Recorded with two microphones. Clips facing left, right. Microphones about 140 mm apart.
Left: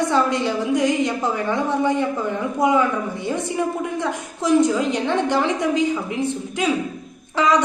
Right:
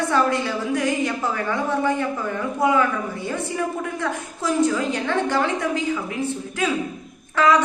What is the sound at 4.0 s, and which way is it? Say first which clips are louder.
A woman's voice: left 2 dB; 20° left (ahead or behind).